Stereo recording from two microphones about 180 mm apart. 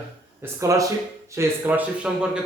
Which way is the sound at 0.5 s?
15° right (ahead or behind).